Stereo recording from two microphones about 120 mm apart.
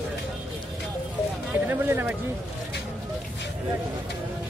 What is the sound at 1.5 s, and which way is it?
Speech, 20° right (ahead or behind).